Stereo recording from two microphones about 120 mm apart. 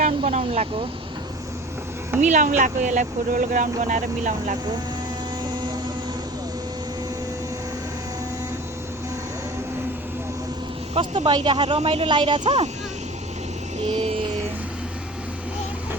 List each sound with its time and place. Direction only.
0.3 s speech: 65° right (ahead or behind)
2.2 s speech: 90° right
10.9 s a woman's voice: 55° right (ahead or behind)
11.3 s speech: 40° right (ahead or behind)
11.8 s a woman's voice: 50° right (ahead or behind)
13.8 s speech: 60° right (ahead or behind)